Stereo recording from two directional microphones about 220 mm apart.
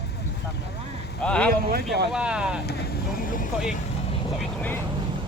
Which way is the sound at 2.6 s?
45° left (ahead or behind).